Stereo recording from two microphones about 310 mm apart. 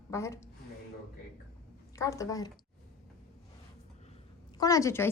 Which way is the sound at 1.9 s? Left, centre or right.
Centre.